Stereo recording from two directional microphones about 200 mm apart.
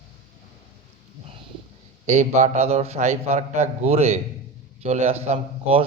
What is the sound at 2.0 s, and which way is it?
A man's voice, 35° right (ahead or behind).